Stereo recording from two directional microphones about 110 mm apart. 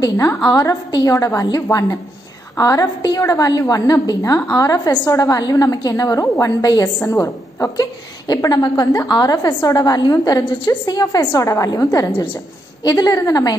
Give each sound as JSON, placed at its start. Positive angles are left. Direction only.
{"t": 0.0, "sound": "a woman's voice", "side_deg": 35}
{"t": 9.5, "sound": "a woman's voice", "side_deg": 20}
{"t": 9.8, "sound": "a woman's voice", "side_deg": 35}